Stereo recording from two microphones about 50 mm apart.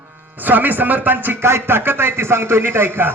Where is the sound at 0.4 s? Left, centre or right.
Right.